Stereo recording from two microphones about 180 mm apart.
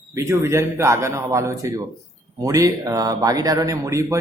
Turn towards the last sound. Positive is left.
turn(degrees=-15)  # may be behind; listen again after turning